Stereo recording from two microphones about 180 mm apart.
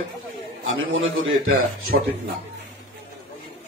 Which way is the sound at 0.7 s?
90° right.